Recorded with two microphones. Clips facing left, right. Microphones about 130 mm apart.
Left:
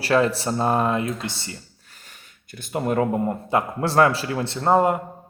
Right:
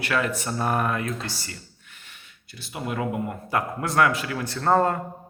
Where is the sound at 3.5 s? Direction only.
30° left (ahead or behind); by 4.9 s 15° left (ahead or behind).